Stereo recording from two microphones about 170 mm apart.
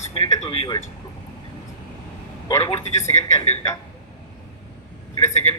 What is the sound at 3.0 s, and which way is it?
Speech, 15° left (ahead or behind).